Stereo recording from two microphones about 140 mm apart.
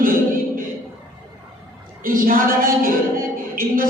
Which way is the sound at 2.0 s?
90° right.